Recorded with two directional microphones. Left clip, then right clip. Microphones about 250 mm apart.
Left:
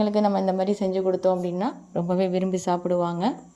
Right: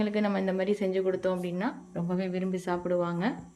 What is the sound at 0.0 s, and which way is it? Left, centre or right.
A woman's voice, centre.